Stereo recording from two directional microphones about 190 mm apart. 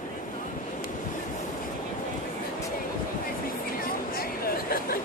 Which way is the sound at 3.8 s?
50° left (ahead or behind).